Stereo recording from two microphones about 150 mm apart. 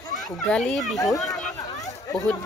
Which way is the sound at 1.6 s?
25° left (ahead or behind).